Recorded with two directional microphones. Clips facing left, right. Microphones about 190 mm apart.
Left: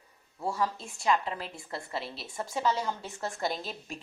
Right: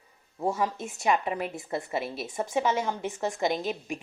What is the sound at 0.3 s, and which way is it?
A woman's voice, 20° right (ahead or behind).